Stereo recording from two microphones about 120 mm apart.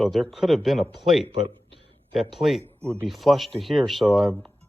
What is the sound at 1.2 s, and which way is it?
Speech, 50° right (ahead or behind).